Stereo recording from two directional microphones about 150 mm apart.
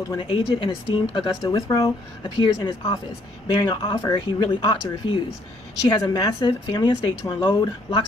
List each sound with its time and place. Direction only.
0.1 s speech: 35° left (ahead or behind)
1.5 s a woman's voice: 20° left (ahead or behind)
7.3 s speech: 15° left (ahead or behind)